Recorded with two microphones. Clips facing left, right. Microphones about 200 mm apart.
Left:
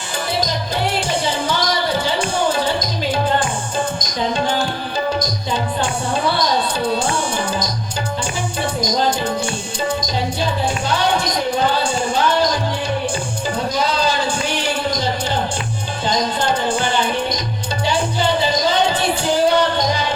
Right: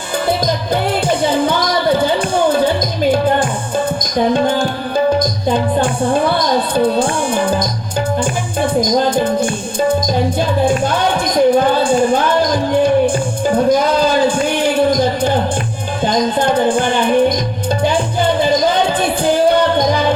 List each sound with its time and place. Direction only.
0.3 s music: 55° right (ahead or behind)
5.2 s speech: 55° right (ahead or behind)
8.2 s music: 55° right (ahead or behind)
10.7 s speech: 55° right (ahead or behind)
13.7 s a sound: 55° right (ahead or behind)
16.0 s music: 55° right (ahead or behind)